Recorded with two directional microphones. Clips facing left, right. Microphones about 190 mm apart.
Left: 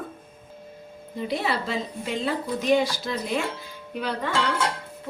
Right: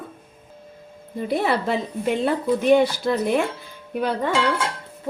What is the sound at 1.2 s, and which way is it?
A woman's voice, 55° right (ahead or behind).